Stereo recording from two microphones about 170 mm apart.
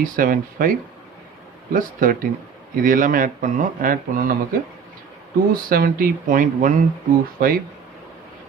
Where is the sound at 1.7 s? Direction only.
55° right (ahead or behind).